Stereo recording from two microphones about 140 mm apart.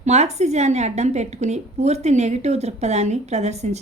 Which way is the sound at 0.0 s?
55° right (ahead or behind).